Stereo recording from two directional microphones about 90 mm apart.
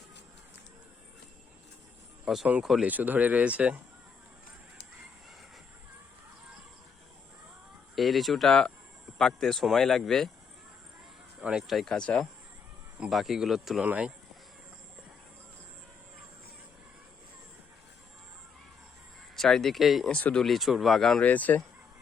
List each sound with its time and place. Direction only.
2.2 s speech: 5° right (ahead or behind)
2.8 s speech: 20° right (ahead or behind)
7.9 s speech: centre (ahead or behind)
11.3 s speech: 10° right (ahead or behind); by 12.3 s 10° left (ahead or behind)
13.1 s speech: centre (ahead or behind)
13.8 s speech: 15° right (ahead or behind)
19.4 s speech: 5° left (ahead or behind)
20.1 s speech: 15° left (ahead or behind)
20.4 s speech: centre (ahead or behind)
21.2 s speech: 15° left (ahead or behind)